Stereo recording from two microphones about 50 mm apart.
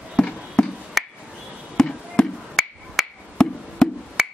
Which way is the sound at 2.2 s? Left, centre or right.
Centre.